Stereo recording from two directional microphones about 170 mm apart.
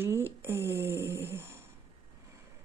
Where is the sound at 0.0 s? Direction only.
15° right (ahead or behind).